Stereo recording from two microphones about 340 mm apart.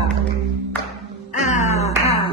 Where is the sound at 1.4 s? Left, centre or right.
Left.